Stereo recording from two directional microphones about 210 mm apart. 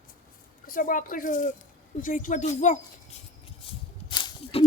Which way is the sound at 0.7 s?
40° left (ahead or behind).